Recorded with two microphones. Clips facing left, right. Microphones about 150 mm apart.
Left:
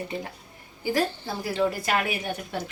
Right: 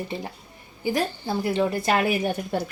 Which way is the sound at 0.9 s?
20° right (ahead or behind).